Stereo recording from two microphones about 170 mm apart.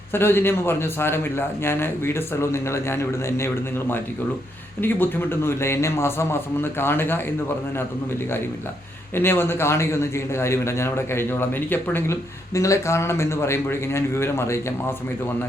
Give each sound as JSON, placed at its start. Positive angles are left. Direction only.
{"t": 0.1, "sound": "a man's voice", "side_deg": 15}
{"t": 9.1, "sound": "a man's voice", "side_deg": 15}